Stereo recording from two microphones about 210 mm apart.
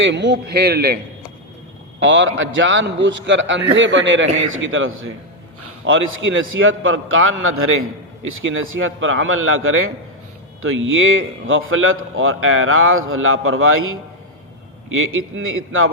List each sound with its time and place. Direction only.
0.0 s a man's voice: 55° right (ahead or behind)
2.0 s a man's voice: 65° right (ahead or behind); by 7.8 s 80° right
8.4 s a man's voice: 70° right (ahead or behind)
14.9 s a man's voice: 75° right (ahead or behind)